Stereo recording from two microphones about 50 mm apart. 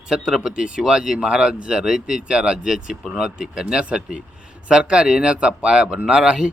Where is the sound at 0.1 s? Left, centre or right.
Centre.